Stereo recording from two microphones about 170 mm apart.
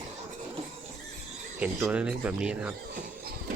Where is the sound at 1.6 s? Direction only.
5° right (ahead or behind).